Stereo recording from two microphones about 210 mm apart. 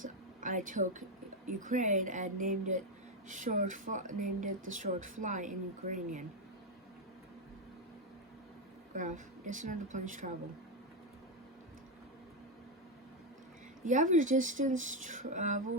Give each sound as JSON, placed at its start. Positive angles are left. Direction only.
{"t": 0.0, "sound": "a sound", "side_deg": -40}
{"t": 1.5, "sound": "speech", "side_deg": -40}
{"t": 9.0, "sound": "speech", "side_deg": -35}
{"t": 13.8, "sound": "speech", "side_deg": -35}